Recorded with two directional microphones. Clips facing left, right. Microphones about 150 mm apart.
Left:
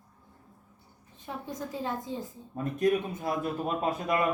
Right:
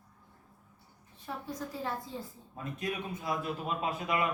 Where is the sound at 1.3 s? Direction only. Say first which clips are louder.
Left 2 dB; 20° left (ahead or behind).